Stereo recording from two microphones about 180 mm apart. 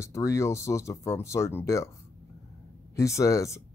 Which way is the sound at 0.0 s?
15° left (ahead or behind).